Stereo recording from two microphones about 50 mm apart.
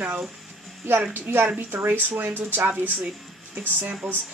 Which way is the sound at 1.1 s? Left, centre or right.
Right.